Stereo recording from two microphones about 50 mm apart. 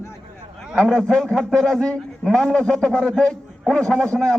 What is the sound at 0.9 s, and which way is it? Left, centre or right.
A man's voice, centre.